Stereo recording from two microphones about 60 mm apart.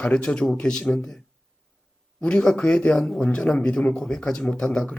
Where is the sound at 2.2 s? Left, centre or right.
Centre.